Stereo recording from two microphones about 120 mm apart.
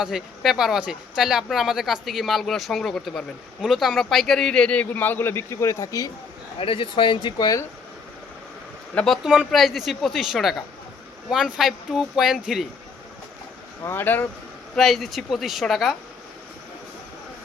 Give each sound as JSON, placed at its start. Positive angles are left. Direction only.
{"t": 0.0, "sound": "speech", "side_deg": -5}
{"t": 6.6, "sound": "speech", "side_deg": 50}
{"t": 9.2, "sound": "speech", "side_deg": -5}
{"t": 13.8, "sound": "speech", "side_deg": 15}
{"t": 14.8, "sound": "speech", "side_deg": 0}